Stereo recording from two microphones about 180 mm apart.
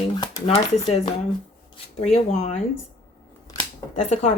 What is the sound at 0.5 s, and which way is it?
Speech, 35° left (ahead or behind).